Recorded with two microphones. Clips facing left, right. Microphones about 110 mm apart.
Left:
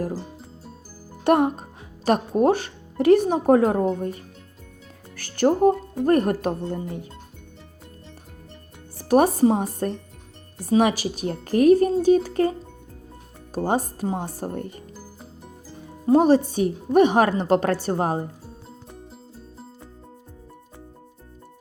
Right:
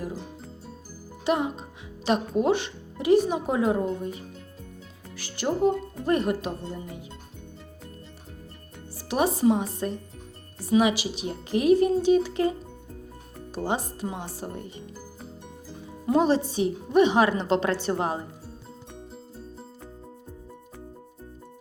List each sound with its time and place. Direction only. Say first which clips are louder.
0.0 s speech: left 6 dB; 35° left (ahead or behind)
1.2 s a child's voice: left 7 dB; 55° left (ahead or behind)
9.0 s a woman's voice: left 7 dB; 50° left (ahead or behind)
16.0 s a woman's voice: left 5 dB; 45° left (ahead or behind)